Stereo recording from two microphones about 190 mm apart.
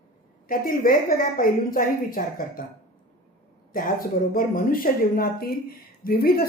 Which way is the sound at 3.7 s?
45° left (ahead or behind).